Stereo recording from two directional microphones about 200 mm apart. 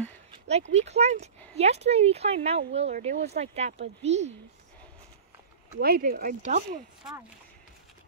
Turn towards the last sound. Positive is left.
turn(degrees=-40)  # may be behind; listen again after turning